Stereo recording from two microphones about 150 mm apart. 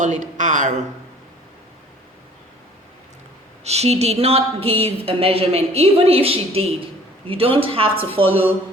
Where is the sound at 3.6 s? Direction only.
45° right (ahead or behind).